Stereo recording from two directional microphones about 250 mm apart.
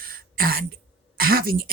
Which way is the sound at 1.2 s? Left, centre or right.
Right.